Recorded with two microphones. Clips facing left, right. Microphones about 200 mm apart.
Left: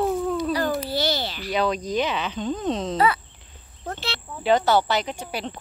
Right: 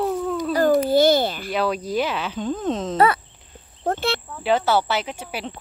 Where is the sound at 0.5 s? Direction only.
50° right (ahead or behind).